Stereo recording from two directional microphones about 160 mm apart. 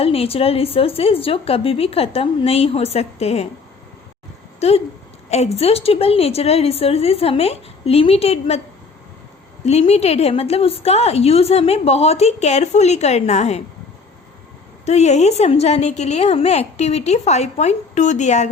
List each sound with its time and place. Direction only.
0.0 s a woman's voice: 40° left (ahead or behind)
4.6 s a woman's voice: 40° left (ahead or behind)
9.6 s a woman's voice: 40° left (ahead or behind)
14.8 s a woman's voice: 45° left (ahead or behind)